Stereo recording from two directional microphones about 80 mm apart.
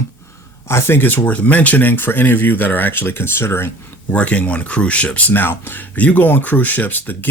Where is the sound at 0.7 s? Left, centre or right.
Left.